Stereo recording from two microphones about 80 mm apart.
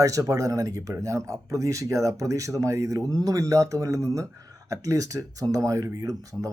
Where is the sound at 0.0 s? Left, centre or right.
Right.